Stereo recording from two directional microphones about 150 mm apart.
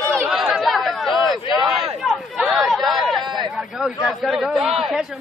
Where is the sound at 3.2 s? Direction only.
30° right (ahead or behind).